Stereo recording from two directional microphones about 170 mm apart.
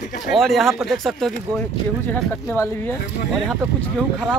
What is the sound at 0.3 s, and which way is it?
Speech, centre (ahead or behind).